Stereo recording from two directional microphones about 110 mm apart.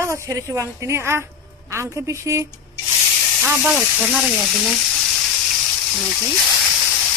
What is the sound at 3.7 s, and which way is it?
Frying, 5° right (ahead or behind).